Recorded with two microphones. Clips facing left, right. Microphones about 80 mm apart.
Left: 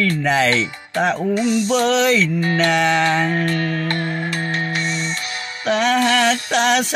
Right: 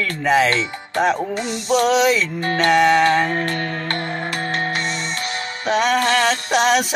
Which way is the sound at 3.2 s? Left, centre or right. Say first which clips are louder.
Left 2 dB; right.